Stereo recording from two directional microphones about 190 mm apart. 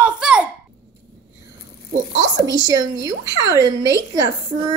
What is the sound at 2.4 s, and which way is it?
A woman's voice, 20° right (ahead or behind).